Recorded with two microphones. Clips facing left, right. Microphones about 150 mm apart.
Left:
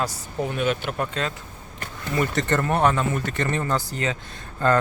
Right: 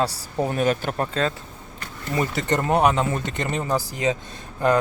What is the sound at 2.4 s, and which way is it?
Speech, 15° right (ahead or behind).